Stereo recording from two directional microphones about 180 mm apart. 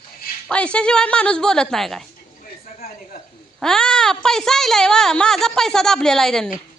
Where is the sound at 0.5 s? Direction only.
5° left (ahead or behind).